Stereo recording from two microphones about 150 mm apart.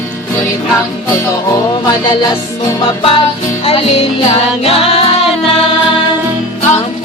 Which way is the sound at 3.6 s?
40° left (ahead or behind).